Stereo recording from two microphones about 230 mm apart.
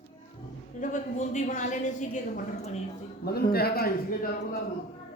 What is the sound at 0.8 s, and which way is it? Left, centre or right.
A woman's voice, left.